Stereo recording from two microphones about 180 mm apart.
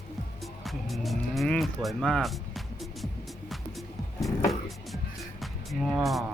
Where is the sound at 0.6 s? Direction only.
Centre (ahead or behind).